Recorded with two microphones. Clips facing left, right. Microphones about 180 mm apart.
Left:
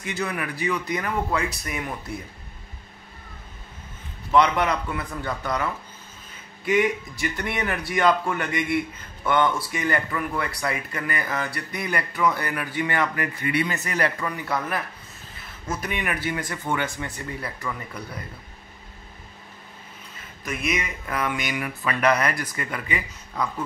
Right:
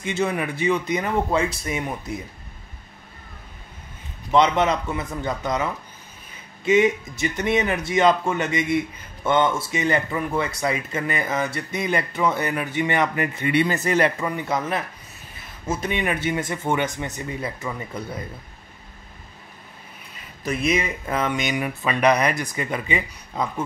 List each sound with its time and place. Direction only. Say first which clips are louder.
0.0 s speech: right 5 dB; 25° right (ahead or behind)
4.3 s speech: right 2 dB; 20° right (ahead or behind)
20.4 s speech: right 5 dB; 30° right (ahead or behind)